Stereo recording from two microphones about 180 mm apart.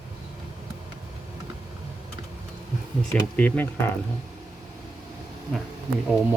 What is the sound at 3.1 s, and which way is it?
Speech, 10° left (ahead or behind).